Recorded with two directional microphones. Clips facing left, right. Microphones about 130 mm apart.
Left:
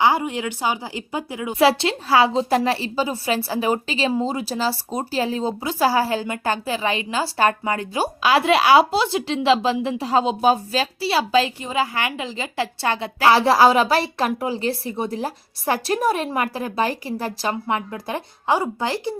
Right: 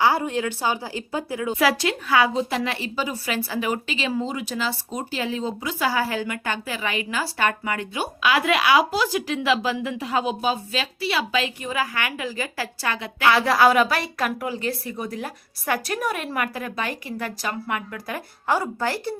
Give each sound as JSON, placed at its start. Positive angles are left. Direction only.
{"t": 0.0, "sound": "a woman's voice", "side_deg": 15}
{"t": 1.5, "sound": "a woman's voice", "side_deg": 30}